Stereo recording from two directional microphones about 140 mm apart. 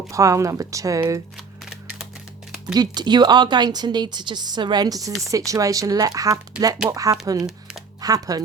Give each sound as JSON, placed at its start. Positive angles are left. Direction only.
{"t": 0.1, "sound": "speech", "side_deg": -20}
{"t": 2.7, "sound": "a woman's voice", "side_deg": -30}